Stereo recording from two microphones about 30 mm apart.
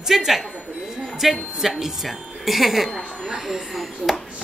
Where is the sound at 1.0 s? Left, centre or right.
Centre.